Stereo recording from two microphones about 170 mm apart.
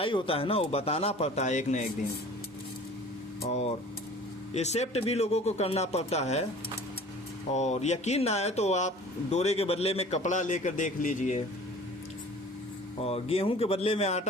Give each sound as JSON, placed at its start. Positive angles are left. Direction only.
{"t": 0.0, "sound": "speech", "side_deg": 30}
{"t": 3.4, "sound": "speech", "side_deg": 35}
{"t": 7.5, "sound": "a man's voice", "side_deg": 40}
{"t": 13.0, "sound": "speech", "side_deg": 35}